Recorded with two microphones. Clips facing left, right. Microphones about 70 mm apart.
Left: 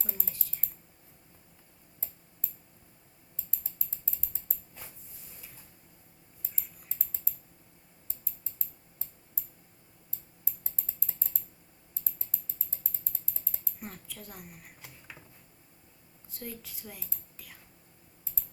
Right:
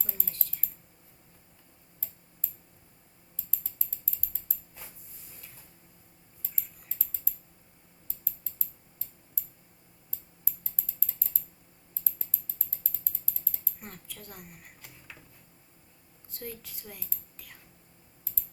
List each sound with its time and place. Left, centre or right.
0.0 s typing: centre
10.4 s typing: left
13.7 s a woman's voice: centre
14.8 s a sound: centre
16.3 s speech: centre